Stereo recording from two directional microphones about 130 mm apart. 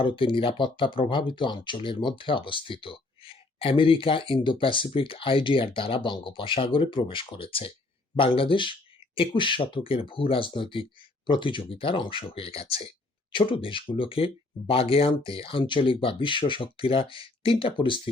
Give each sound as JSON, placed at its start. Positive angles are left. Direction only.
{"t": 0.0, "sound": "speech", "side_deg": 40}